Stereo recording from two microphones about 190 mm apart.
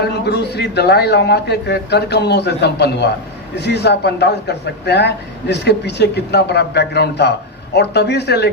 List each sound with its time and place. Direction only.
0.0 s speech: 60° left (ahead or behind)